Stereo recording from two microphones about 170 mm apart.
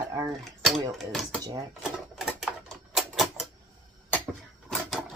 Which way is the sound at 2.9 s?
Centre (ahead or behind).